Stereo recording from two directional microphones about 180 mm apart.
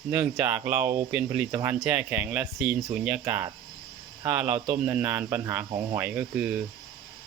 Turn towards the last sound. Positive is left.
turn(degrees=-5)  # may be behind; listen again after turning